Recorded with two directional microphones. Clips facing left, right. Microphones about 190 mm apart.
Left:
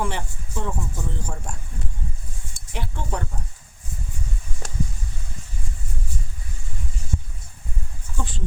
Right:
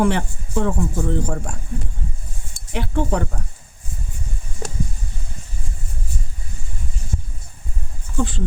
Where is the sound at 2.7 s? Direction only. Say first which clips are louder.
Right 9 dB; 70° right (ahead or behind).